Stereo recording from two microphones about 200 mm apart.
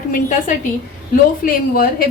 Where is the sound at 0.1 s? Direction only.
40° left (ahead or behind).